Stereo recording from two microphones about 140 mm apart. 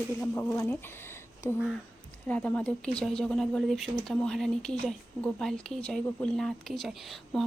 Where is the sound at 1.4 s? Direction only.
20° left (ahead or behind); by 7.4 s centre (ahead or behind).